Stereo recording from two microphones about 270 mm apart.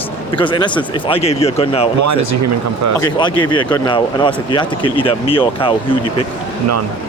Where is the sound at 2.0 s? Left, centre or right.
Right.